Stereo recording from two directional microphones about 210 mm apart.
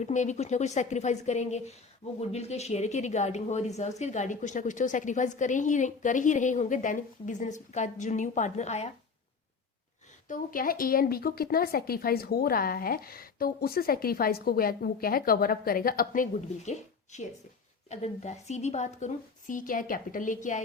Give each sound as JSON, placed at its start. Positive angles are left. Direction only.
{"t": 0.0, "sound": "a woman's voice", "side_deg": 35}
{"t": 10.2, "sound": "a woman's voice", "side_deg": 40}